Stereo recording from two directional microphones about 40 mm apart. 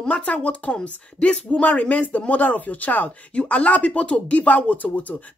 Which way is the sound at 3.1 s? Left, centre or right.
Left.